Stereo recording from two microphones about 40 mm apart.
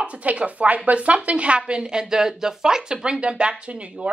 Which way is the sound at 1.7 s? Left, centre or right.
Centre.